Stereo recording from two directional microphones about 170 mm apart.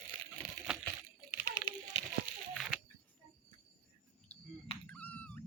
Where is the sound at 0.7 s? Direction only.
5° right (ahead or behind).